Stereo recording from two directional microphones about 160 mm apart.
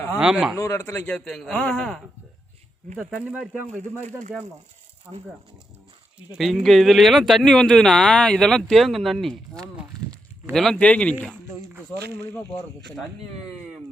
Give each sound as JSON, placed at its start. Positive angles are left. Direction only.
{"t": 0.2, "sound": "speech", "side_deg": -5}
{"t": 0.5, "sound": "a man's voice", "side_deg": 20}
{"t": 0.9, "sound": "speech", "side_deg": 10}
{"t": 3.0, "sound": "speech", "side_deg": -5}
{"t": 6.3, "sound": "speech", "side_deg": 0}